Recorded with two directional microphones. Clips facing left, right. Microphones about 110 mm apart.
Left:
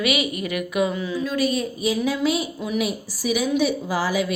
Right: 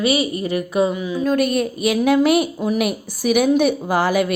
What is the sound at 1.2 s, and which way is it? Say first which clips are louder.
A woman's voice: right 6 dB; 50° right (ahead or behind).